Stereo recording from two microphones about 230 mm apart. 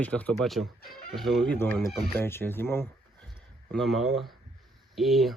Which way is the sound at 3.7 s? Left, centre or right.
Centre.